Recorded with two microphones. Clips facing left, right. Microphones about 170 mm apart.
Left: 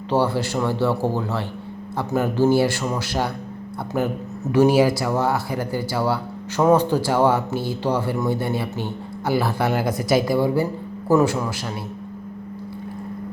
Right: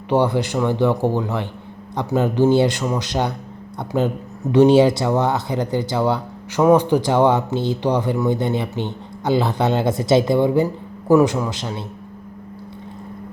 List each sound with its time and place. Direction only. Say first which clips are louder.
0.1 s speech: right 3 dB; 15° right (ahead or behind)